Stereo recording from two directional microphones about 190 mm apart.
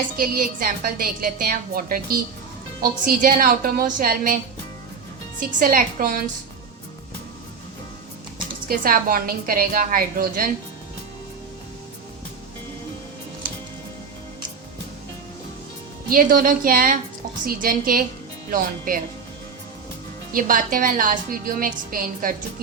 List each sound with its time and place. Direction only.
0.2 s a woman's voice: 50° right (ahead or behind)
5.4 s a woman's voice: 45° right (ahead or behind)
8.6 s a woman's voice: 50° right (ahead or behind)
16.0 s a woman's voice: 45° right (ahead or behind)
20.3 s a woman's voice: 45° right (ahead or behind)